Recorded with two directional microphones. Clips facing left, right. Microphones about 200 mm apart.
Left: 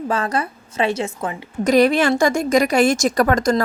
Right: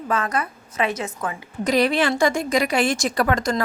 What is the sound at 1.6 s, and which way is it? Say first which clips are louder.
A woman's voice: left 5 dB; 45° left (ahead or behind).